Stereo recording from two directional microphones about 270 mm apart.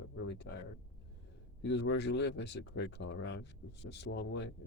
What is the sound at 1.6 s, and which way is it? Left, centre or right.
Speech, left.